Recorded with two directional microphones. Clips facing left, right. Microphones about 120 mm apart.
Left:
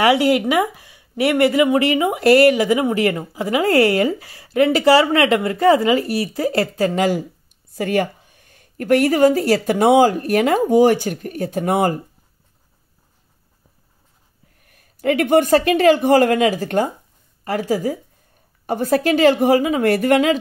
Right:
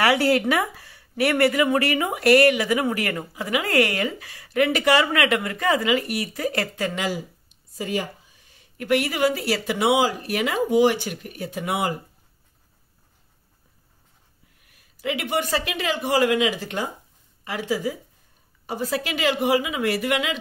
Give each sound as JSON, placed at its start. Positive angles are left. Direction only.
{"t": 0.0, "sound": "speech", "side_deg": 20}
{"t": 7.7, "sound": "speech", "side_deg": 65}
{"t": 14.6, "sound": "speech", "side_deg": 45}